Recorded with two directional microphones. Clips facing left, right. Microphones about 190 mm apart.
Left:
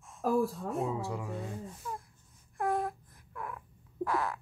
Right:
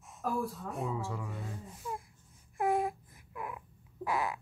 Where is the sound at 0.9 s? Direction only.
15° left (ahead or behind).